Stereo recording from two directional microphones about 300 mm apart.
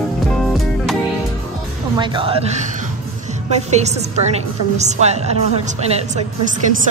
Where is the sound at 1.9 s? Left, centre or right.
Centre.